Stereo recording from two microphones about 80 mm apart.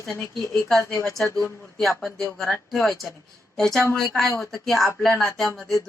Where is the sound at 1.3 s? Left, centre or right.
Left.